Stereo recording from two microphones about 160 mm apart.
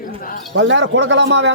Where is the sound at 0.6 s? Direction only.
90° right.